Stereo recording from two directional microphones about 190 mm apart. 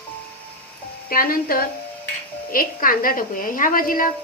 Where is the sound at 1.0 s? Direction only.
50° left (ahead or behind).